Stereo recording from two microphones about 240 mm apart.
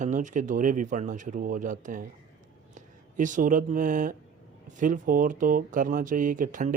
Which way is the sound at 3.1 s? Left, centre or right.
Right.